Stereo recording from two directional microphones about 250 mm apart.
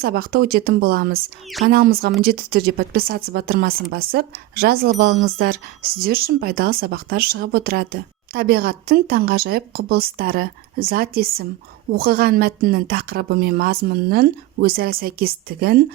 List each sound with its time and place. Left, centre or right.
0.0 s speech: right